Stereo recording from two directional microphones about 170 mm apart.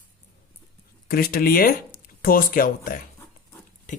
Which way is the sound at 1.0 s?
60° left (ahead or behind).